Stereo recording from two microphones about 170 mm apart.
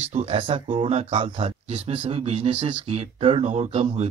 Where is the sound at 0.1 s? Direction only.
35° right (ahead or behind).